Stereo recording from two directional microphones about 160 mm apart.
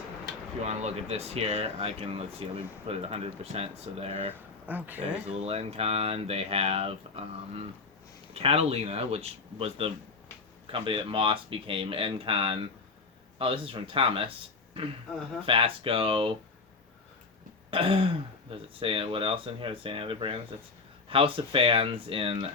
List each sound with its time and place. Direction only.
0.6 s speech: 45° right (ahead or behind)
4.6 s speech: 10° right (ahead or behind)
5.3 s speech: 40° right (ahead or behind)
15.4 s speech: 35° right (ahead or behind)
17.7 s throat clearing: 35° right (ahead or behind)
18.8 s speech: 35° right (ahead or behind)